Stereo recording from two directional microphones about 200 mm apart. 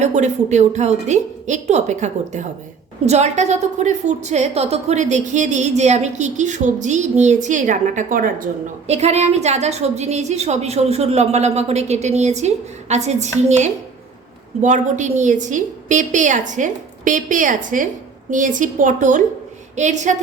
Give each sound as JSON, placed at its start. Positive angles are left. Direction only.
{"t": 0.0, "sound": "a woman's voice", "side_deg": -35}
{"t": 8.9, "sound": "a woman's voice", "side_deg": -30}